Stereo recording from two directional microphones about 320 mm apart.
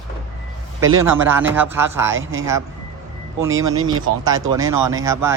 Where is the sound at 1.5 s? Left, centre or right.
Centre.